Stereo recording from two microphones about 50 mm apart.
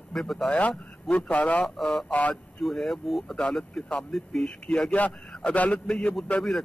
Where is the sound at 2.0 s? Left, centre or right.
Left.